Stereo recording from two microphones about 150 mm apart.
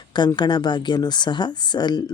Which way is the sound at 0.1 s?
30° left (ahead or behind).